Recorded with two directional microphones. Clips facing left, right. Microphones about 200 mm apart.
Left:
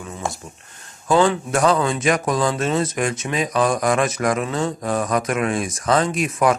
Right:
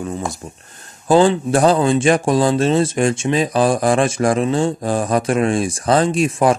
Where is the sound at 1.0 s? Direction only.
30° right (ahead or behind).